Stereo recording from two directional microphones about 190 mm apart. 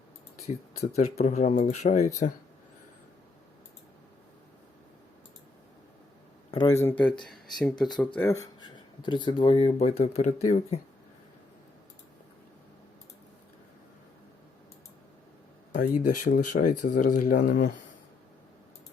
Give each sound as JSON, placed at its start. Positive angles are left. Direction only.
{"t": 0.4, "sound": "speech", "side_deg": 35}
{"t": 6.5, "sound": "speech", "side_deg": 30}
{"t": 6.8, "sound": "speech", "side_deg": 10}
{"t": 15.7, "sound": "speech", "side_deg": 45}